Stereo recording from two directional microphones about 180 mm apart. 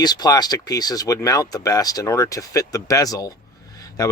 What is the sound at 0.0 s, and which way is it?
Speech, 20° left (ahead or behind).